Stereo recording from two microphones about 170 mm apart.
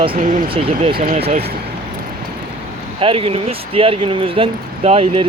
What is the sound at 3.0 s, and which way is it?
Speech, 35° right (ahead or behind).